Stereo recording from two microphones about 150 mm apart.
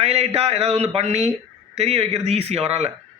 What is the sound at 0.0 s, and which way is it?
Speech, 45° right (ahead or behind).